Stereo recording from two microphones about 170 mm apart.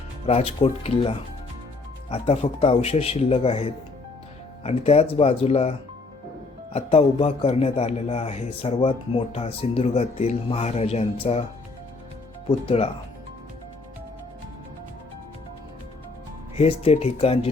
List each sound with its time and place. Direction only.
0.3 s speech: 35° left (ahead or behind)
6.7 s speech: 35° left (ahead or behind)
12.5 s speech: 35° left (ahead or behind)
16.6 s speech: 35° left (ahead or behind)